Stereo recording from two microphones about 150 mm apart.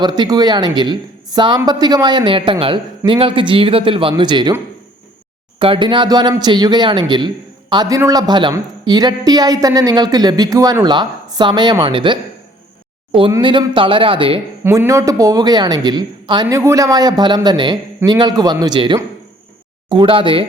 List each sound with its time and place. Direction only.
0.0 s a woman's voice: 30° right (ahead or behind)
5.5 s a woman's voice: 35° right (ahead or behind)
14.6 s a woman's voice: 20° right (ahead or behind); by 20.4 s 35° right (ahead or behind)